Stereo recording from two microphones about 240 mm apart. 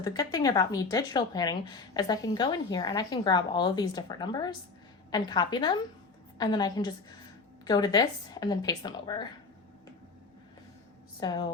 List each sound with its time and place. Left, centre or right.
0.0 s a woman's voice: centre
11.2 s a woman's voice: centre